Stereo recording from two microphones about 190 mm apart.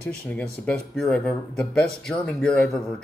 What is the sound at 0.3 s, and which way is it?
Speech, 5° left (ahead or behind).